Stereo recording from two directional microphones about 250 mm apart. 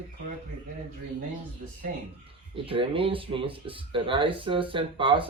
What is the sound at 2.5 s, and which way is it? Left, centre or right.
Speech, right.